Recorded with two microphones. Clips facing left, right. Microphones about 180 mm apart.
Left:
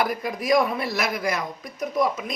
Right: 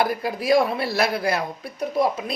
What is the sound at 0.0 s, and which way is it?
Speech, 30° right (ahead or behind).